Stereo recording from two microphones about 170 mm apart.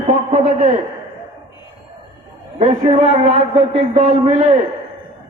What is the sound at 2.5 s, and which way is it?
A man's voice, 30° right (ahead or behind).